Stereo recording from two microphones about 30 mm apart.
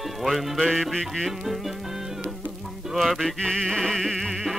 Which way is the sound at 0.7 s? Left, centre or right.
Centre.